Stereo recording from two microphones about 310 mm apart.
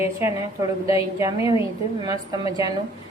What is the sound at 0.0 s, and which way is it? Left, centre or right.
A woman's voice, centre.